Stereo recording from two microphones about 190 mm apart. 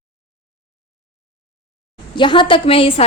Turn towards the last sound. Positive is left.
turn(degrees=30)  # may be behind; listen again after turning